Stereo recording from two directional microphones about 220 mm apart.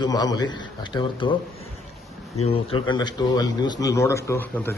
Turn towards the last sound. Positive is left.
turn(degrees=10)  # may be behind; listen again after turning